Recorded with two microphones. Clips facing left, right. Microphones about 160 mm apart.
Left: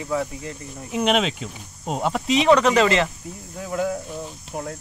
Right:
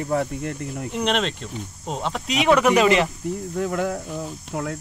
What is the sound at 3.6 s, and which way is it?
Speech, 60° right (ahead or behind).